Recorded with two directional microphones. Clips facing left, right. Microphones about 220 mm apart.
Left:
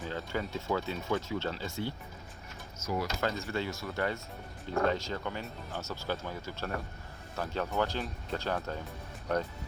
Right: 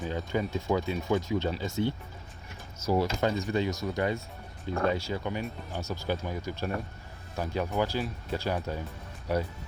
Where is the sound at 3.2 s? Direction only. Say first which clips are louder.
Right 5 dB; 15° right (ahead or behind).